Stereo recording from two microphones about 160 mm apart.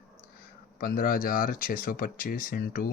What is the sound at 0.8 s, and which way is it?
Speech, 60° left (ahead or behind).